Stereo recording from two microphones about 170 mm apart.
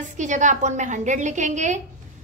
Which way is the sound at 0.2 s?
45° right (ahead or behind).